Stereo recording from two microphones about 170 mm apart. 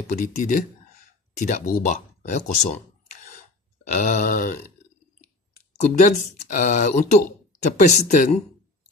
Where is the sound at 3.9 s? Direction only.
45° left (ahead or behind).